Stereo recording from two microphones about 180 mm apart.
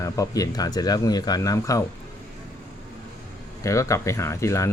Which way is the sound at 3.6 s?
15° left (ahead or behind).